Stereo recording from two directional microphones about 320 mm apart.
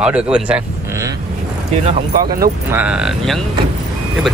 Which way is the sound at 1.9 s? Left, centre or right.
Right.